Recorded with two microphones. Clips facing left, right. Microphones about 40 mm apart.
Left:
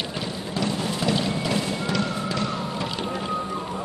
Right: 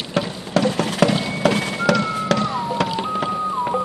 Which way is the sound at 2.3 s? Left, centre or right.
Right.